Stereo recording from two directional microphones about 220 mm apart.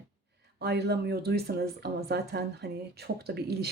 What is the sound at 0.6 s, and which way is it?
Speech, 50° right (ahead or behind).